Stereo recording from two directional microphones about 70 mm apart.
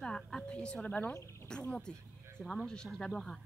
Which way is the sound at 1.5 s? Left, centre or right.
Centre.